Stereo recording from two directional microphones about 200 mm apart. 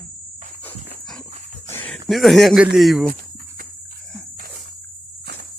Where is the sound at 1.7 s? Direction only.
5° left (ahead or behind).